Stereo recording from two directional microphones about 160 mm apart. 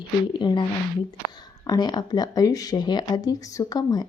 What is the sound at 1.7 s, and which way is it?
Speech, 25° left (ahead or behind).